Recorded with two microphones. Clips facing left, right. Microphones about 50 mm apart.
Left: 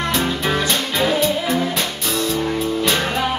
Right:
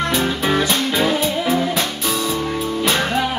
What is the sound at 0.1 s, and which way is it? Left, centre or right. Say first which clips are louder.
Music: right 1 dB; centre.